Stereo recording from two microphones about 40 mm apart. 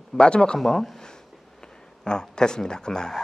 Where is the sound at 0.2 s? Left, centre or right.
Left.